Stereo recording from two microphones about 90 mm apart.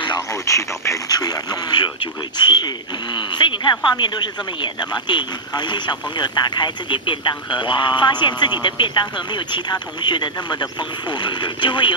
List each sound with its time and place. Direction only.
0.3 s speech: 35° left (ahead or behind); by 11.9 s 60° left (ahead or behind)